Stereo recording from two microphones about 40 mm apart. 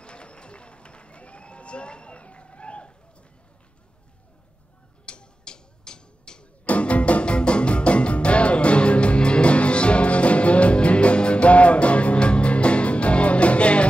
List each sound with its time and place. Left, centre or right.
0.0 s run: left
5.0 s a sound: left
6.6 s music: left